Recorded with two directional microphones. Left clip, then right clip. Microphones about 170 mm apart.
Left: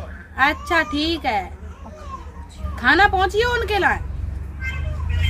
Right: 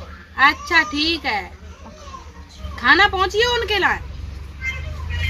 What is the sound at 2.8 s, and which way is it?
A woman's voice, 35° left (ahead or behind).